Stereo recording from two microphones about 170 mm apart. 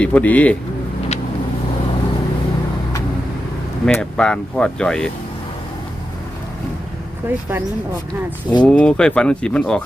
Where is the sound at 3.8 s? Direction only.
5° left (ahead or behind).